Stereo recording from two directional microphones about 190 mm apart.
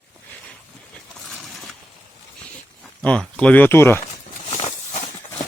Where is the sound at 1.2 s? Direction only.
Centre (ahead or behind).